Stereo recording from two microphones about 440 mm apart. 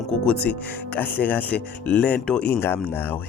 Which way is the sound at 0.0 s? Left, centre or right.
Centre.